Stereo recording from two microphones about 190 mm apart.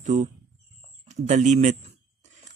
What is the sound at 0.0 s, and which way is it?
Speech, 40° right (ahead or behind).